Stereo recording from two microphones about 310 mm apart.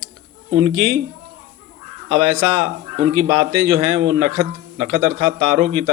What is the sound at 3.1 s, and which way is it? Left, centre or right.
A man's voice, right.